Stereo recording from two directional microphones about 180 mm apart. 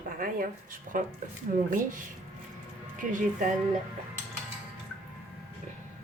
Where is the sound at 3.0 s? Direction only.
45° right (ahead or behind).